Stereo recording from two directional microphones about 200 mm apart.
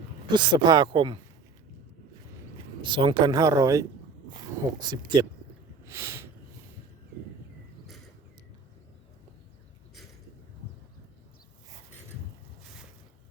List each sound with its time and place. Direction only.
0.3 s speech: 20° right (ahead or behind)
2.8 s speech: 25° right (ahead or behind)